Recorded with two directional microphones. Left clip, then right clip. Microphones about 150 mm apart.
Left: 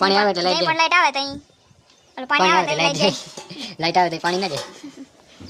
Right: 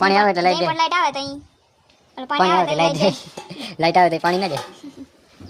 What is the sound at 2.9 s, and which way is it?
Speech, 40° right (ahead or behind).